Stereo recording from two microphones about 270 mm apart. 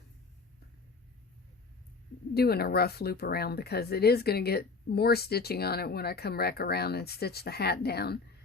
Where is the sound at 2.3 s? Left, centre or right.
Left.